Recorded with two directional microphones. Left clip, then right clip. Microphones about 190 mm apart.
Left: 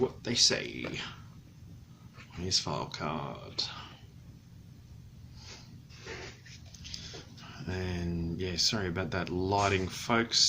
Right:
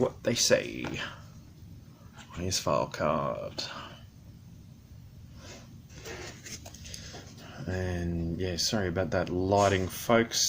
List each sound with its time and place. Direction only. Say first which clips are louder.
0.2 s speech: right 3 dB; 40° right (ahead or behind)
2.4 s speech: right 4 dB; 35° right (ahead or behind)
6.8 s dog: left 6 dB; 25° right (ahead or behind)
7.5 s speech: right 3 dB; 20° right (ahead or behind)